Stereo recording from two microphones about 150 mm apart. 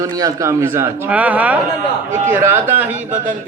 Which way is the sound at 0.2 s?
20° right (ahead or behind).